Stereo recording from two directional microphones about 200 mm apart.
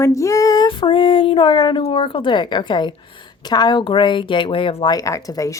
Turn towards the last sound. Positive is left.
turn(degrees=15)  # may be behind; listen again after turning